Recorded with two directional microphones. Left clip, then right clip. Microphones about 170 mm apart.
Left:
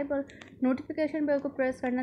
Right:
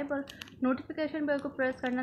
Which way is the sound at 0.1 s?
20° left (ahead or behind).